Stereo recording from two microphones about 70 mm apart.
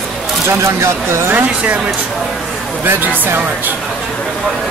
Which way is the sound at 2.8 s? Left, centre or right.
Right.